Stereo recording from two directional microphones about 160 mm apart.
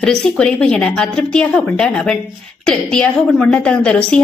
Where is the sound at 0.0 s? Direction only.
5° left (ahead or behind).